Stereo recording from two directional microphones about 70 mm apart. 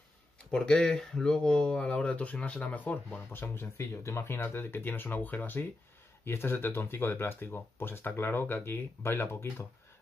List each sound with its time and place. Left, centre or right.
0.5 s speech: centre; by 9.7 s left